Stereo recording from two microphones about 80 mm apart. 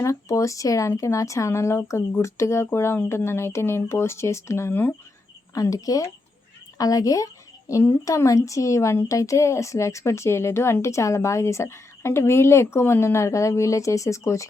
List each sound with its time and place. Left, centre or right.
0.0 s speech: left
5.5 s speech: left